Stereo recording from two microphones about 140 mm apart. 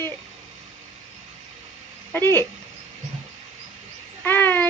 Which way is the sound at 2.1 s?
15° left (ahead or behind).